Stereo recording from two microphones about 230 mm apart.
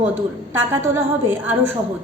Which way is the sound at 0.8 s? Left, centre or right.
Centre.